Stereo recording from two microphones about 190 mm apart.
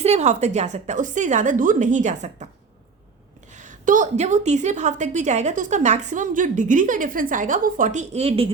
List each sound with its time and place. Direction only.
0.0 s a woman's voice: 35° right (ahead or behind)
3.5 s a woman's voice: 40° right (ahead or behind)